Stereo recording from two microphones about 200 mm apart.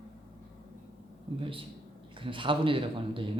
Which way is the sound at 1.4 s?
25° right (ahead or behind).